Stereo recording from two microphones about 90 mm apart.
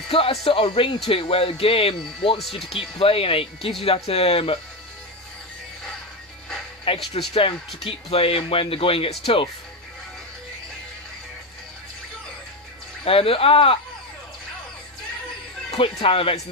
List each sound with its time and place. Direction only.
0.1 s speech: 90° left
7.2 s speech: 90° left
13.0 s speech: 90° left
16.1 s speech: 90° left